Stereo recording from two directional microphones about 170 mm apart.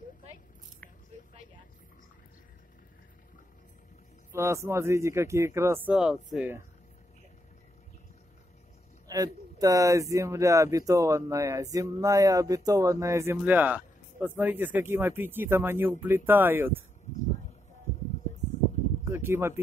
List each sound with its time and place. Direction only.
4.3 s speech: 15° right (ahead or behind)
5.9 s speech: 5° right (ahead or behind)
9.0 s speech: 20° right (ahead or behind)
19.0 s speech: 15° right (ahead or behind)